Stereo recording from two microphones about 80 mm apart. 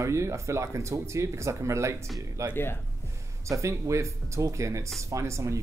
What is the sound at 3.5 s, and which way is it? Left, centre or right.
Speech, right.